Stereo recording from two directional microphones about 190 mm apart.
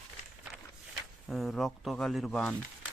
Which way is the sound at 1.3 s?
Centre (ahead or behind).